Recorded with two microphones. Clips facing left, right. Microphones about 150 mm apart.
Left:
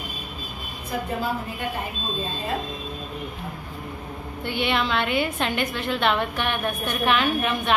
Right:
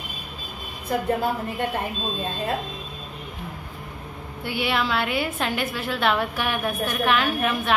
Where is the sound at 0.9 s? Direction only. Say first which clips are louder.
Right 4 dB; 65° right (ahead or behind).